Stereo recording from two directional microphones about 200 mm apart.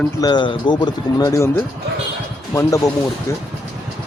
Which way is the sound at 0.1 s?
20° left (ahead or behind).